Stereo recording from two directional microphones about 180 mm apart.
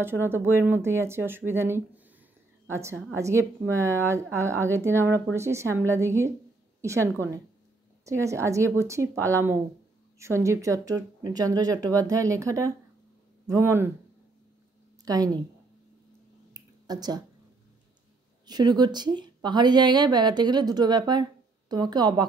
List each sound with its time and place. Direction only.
0.0 s a woman's voice: 10° right (ahead or behind)
15.0 s speech: 20° right (ahead or behind)
16.5 s a sound: 20° right (ahead or behind)
18.5 s speech: 20° right (ahead or behind)